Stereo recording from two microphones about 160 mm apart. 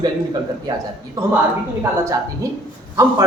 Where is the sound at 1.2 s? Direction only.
20° right (ahead or behind).